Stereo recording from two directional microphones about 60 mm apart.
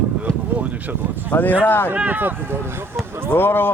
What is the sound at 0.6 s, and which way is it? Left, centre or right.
Speech, right.